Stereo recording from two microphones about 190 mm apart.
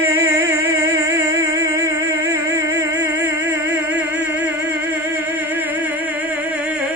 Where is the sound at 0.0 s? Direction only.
15° right (ahead or behind).